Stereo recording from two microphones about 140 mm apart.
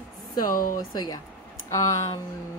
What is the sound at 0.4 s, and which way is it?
Speech, 80° left.